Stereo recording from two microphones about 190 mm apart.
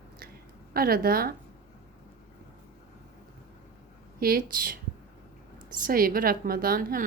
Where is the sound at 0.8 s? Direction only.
50° right (ahead or behind).